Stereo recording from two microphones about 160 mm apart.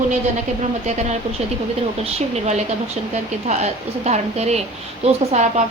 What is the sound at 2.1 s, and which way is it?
Speech, 45° right (ahead or behind).